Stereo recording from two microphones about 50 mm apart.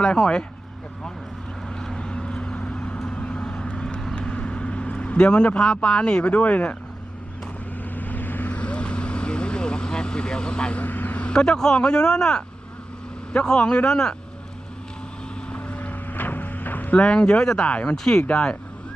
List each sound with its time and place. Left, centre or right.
0.0 s speech: centre
1.8 s vehicle: centre
5.5 s speech: centre
6.2 s speech: left
7.9 s vehicle: left
10.8 s vehicle: left
11.3 s speech: centre
15.4 s vehicle: left
17.0 s speech: centre
17.7 s speech: left
17.9 s speech: centre
18.2 s speech: left